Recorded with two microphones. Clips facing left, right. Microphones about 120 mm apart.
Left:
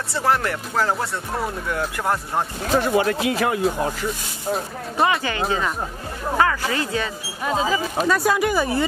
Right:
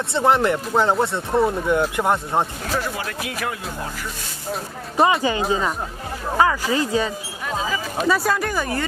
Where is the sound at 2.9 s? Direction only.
35° left (ahead or behind).